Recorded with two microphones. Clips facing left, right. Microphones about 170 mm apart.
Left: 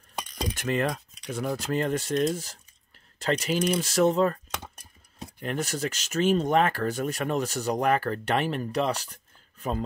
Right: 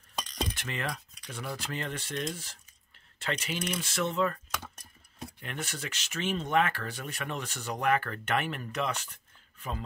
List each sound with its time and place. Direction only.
0.6 s speech: 45° left (ahead or behind)
5.4 s speech: 40° left (ahead or behind)